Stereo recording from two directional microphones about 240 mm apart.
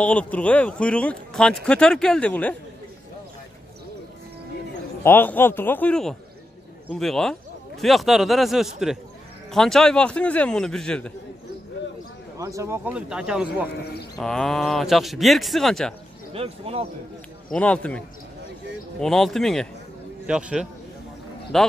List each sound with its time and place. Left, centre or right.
0.0 s speech: centre
5.0 s a man's voice: centre
12.4 s a man's voice: centre
16.3 s speech: right
17.5 s speech: centre